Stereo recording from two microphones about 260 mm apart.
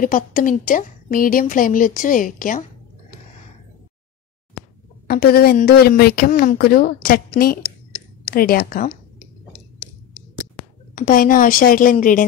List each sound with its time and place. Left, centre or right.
0.0 s a woman's voice: left
5.0 s a woman's voice: left
11.0 s a woman's voice: left